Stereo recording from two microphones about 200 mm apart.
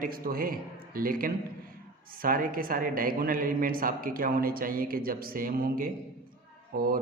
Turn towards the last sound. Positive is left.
turn(degrees=-45)  # may be behind; listen again after turning